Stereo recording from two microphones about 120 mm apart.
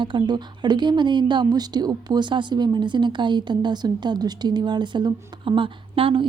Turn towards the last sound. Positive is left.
turn(degrees=-45)  # may be behind; listen again after turning